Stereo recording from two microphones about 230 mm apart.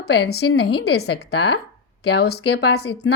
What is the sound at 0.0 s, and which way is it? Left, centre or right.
A woman's voice, left.